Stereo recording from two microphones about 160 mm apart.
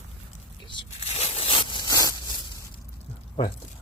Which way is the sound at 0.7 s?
35° left (ahead or behind).